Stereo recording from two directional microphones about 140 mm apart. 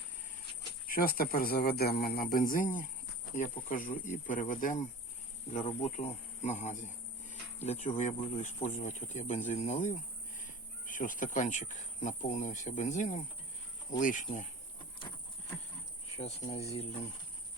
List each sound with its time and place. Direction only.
0.9 s speech: 90° left; by 4.8 s 70° left (ahead or behind)
5.5 s speech: 60° left (ahead or behind)
16.1 s speech: 50° left (ahead or behind)